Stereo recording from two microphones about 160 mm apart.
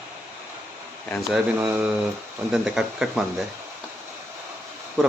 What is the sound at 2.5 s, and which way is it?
Speech, 5° right (ahead or behind).